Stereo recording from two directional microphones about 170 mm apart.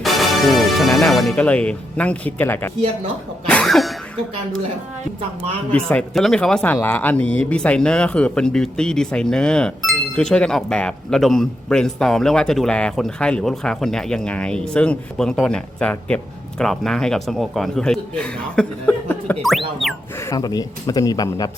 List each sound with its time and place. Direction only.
0.0 s speech: centre (ahead or behind)
3.4 s cough: 5° left (ahead or behind)
5.7 s speech: 5° left (ahead or behind)
20.3 s speech: 20° left (ahead or behind)